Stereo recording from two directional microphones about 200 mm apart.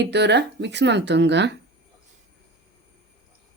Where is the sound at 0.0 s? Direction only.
60° right (ahead or behind).